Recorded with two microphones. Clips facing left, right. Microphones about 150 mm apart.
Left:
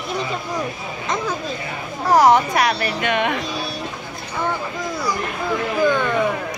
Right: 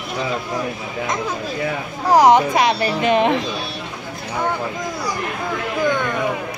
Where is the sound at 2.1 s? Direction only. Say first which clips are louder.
Right 2 dB; 15° right (ahead or behind); by 3.4 s 30° right (ahead or behind).